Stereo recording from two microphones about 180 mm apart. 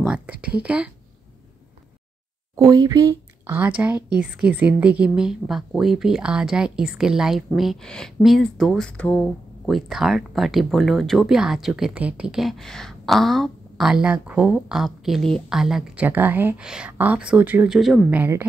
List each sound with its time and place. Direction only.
0.0 s speech: 5° right (ahead or behind)
2.5 s speech: 20° right (ahead or behind)